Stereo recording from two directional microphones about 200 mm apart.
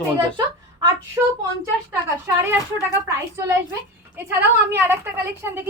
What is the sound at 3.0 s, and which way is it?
Speech, 10° right (ahead or behind).